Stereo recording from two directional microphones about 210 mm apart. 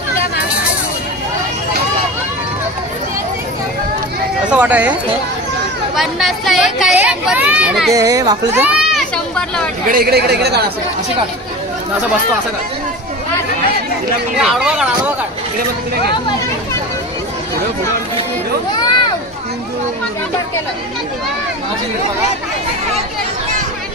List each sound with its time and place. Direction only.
4.5 s speech: 5° right (ahead or behind)
5.9 s speech: centre (ahead or behind)
7.9 s speech: 15° right (ahead or behind)
8.6 s children playing: centre (ahead or behind)
9.8 s speech: 45° right (ahead or behind)
14.4 s speech: 5° right (ahead or behind)